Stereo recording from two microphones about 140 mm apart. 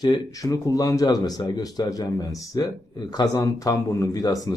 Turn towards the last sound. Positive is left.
turn(degrees=25)  # may be behind; listen again after turning